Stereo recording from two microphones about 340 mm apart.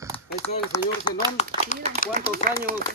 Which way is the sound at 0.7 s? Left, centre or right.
Centre.